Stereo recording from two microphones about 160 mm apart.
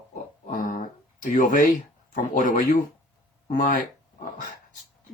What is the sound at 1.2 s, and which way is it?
Speech, 55° left (ahead or behind).